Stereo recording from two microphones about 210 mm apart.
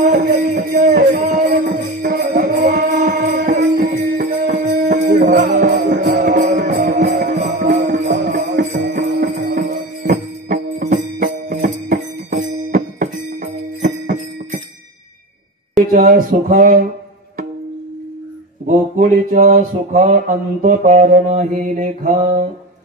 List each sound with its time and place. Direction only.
0.0 s music: 35° right (ahead or behind)
8.9 s jingle bell: 35° right (ahead or behind)
15.9 s mantra: 40° right (ahead or behind)
18.7 s mantra: 35° right (ahead or behind)